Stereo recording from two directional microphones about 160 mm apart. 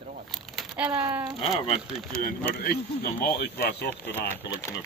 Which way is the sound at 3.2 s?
80° left.